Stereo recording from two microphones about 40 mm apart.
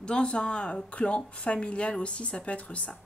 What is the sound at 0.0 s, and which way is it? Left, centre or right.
Speech, left.